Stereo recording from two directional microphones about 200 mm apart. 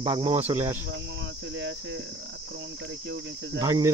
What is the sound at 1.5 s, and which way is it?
Cricket, 65° right (ahead or behind).